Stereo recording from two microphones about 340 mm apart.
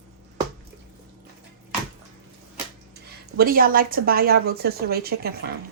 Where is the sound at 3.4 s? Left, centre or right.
Right.